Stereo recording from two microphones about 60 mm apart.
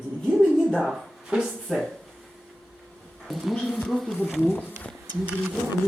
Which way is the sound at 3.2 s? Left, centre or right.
Centre.